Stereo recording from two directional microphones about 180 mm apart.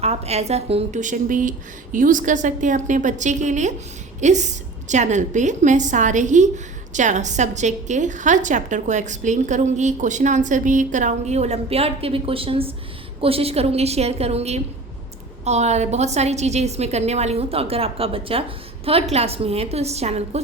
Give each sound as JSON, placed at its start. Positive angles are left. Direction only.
{"t": 0.0, "sound": "a woman's voice", "side_deg": -35}